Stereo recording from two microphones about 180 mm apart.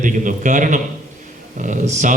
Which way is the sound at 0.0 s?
45° right (ahead or behind).